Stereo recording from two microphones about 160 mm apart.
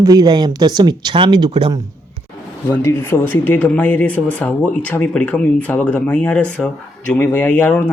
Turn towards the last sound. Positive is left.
turn(degrees=10)  # may be behind; listen again after turning